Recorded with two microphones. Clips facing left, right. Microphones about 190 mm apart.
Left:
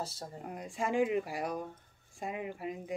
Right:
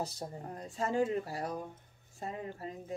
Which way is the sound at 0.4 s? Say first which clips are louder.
Left 1 dB; 10° left (ahead or behind).